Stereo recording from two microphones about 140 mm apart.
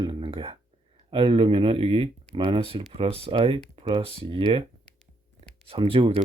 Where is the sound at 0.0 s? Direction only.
40° right (ahead or behind).